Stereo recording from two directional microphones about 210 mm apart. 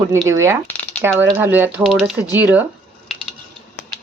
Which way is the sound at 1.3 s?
10° right (ahead or behind).